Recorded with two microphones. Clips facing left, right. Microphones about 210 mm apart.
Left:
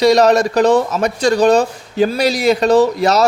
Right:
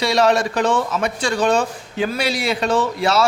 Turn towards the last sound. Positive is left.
turn(degrees=40)  # may be behind; listen again after turning